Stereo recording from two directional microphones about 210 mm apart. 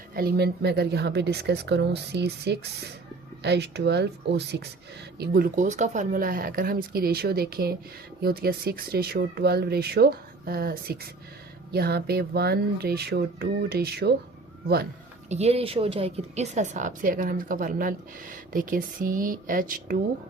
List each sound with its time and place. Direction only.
0.2 s speech: 50° right (ahead or behind)
15.3 s a woman's voice: 30° right (ahead or behind)